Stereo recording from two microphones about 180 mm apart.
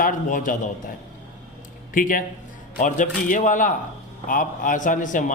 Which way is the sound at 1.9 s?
50° left (ahead or behind).